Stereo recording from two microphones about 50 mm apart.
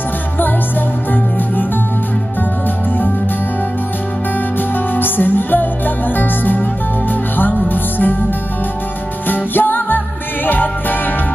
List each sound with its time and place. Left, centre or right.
4.9 s music: left
9.3 s music: left